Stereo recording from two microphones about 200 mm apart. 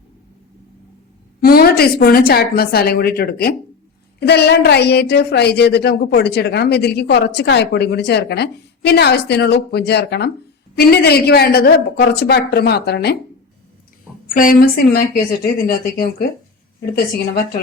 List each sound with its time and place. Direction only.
1.4 s a woman's voice: 50° left (ahead or behind)
14.3 s a woman's voice: 45° left (ahead or behind)